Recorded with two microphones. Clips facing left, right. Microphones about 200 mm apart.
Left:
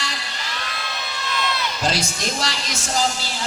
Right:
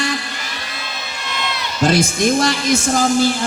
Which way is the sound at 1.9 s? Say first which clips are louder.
Right 10 dB; 50° right (ahead or behind).